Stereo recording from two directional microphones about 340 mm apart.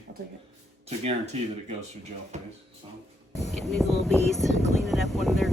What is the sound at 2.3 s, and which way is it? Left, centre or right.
Speech, centre.